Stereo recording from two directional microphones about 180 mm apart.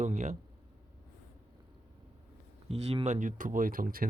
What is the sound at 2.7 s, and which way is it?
Speech, 35° right (ahead or behind).